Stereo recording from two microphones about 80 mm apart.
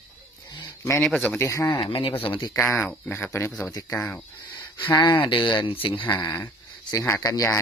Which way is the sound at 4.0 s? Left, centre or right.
Centre.